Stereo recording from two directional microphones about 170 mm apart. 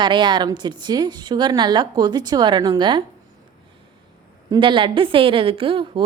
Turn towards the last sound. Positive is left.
turn(degrees=-30)  # may be behind; listen again after turning